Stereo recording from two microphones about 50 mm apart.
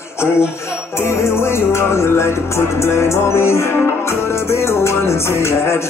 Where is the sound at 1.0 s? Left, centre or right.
Left.